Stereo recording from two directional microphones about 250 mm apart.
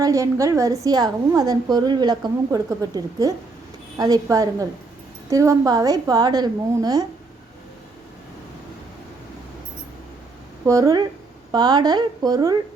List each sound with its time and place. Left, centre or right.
0.0 s a woman's voice: centre
10.7 s a woman's voice: centre